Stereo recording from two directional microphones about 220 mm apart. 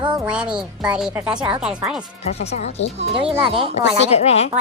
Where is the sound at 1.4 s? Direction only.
20° right (ahead or behind).